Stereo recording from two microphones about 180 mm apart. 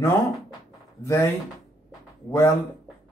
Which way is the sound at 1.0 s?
15° left (ahead or behind).